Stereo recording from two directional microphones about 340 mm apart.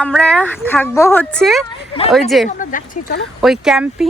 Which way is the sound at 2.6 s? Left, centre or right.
Left.